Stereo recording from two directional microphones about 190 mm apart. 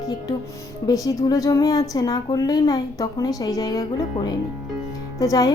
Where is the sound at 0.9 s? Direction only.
20° left (ahead or behind).